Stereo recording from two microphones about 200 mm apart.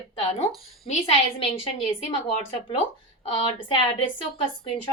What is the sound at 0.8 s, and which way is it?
A woman's voice, 30° left (ahead or behind).